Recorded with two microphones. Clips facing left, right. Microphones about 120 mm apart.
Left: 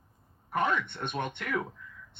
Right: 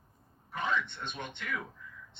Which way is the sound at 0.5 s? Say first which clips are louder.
Left 4 dB; 55° left (ahead or behind).